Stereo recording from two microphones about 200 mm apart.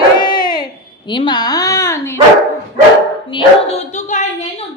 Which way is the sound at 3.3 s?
30° left (ahead or behind).